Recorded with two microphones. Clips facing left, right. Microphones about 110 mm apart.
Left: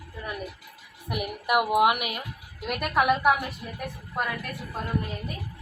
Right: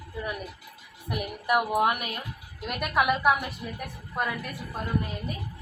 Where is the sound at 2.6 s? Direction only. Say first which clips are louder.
Left 2 dB; centre (ahead or behind).